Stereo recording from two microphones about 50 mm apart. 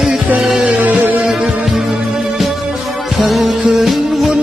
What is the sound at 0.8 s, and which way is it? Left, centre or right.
Music, right.